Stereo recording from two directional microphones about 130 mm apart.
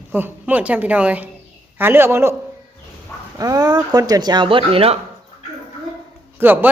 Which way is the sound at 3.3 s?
30° right (ahead or behind).